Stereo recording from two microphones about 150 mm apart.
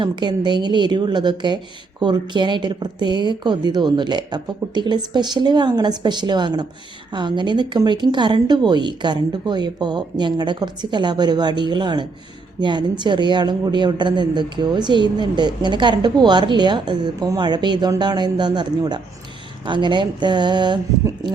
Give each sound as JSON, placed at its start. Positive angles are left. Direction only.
{"t": 0.0, "sound": "a woman's voice", "side_deg": -30}